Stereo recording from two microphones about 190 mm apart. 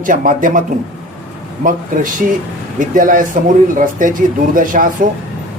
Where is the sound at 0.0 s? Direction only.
45° right (ahead or behind).